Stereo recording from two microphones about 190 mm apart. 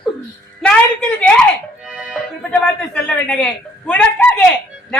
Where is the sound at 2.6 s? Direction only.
5° left (ahead or behind).